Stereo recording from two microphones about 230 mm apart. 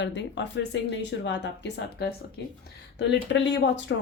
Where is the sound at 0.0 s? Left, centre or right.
Left.